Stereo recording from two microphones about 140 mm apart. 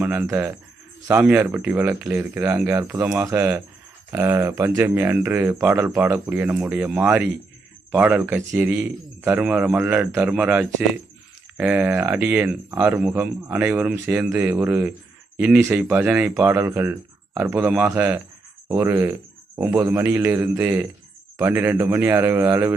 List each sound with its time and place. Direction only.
0.0 s speech: 15° right (ahead or behind)